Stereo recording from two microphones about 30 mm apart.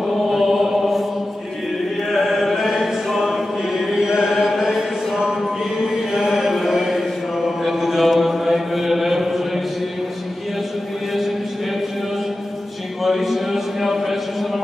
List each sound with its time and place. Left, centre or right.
0.3 s chant: centre
2.1 s chant: centre
3.7 s chant: centre
6.1 s a sound: centre
7.4 s mantra: centre
13.0 s a sound: centre